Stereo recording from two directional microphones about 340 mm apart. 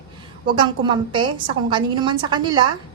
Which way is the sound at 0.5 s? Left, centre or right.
Centre.